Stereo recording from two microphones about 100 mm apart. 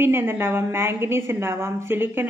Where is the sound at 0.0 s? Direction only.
25° right (ahead or behind).